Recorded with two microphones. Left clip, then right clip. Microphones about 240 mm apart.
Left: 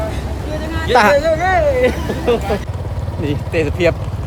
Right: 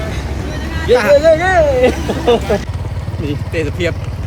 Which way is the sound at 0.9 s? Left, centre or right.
Centre.